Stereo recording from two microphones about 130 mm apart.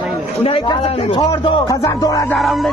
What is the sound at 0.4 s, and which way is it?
Speech, 45° left (ahead or behind).